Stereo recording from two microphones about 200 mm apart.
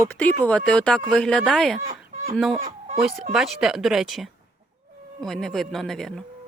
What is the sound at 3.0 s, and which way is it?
Speech, centre (ahead or behind).